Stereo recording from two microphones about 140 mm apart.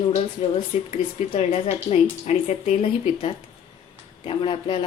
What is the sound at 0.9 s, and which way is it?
Speech, 50° left (ahead or behind).